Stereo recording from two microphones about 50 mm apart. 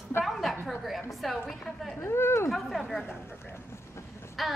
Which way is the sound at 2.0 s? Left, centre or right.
Left.